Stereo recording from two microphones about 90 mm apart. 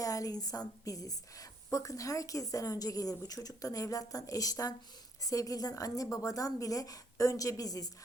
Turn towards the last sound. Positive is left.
turn(degrees=40)  # may be behind; listen again after turning